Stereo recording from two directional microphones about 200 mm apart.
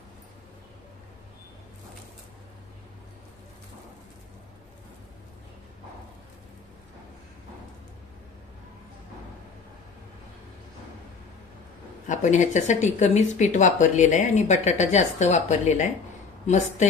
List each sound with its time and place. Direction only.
12.1 s speech: 35° left (ahead or behind)